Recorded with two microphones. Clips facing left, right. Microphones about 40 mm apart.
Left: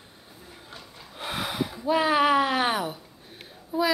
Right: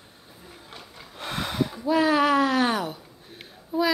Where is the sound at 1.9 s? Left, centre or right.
Centre.